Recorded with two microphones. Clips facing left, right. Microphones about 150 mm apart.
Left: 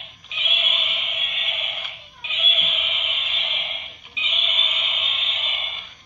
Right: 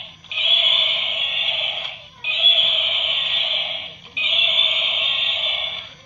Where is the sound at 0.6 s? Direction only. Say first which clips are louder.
Right 3 dB; 20° right (ahead or behind).